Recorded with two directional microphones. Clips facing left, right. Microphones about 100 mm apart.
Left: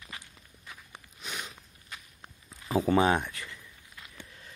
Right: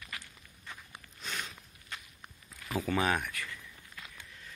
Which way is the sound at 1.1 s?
15° left (ahead or behind).